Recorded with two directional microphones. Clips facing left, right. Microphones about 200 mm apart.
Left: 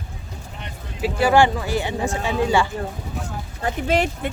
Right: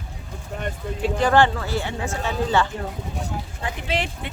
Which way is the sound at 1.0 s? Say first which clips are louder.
Left 2 dB; 10° left (ahead or behind).